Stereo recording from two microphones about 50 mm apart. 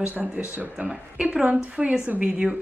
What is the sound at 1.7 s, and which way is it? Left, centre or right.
Speech, centre.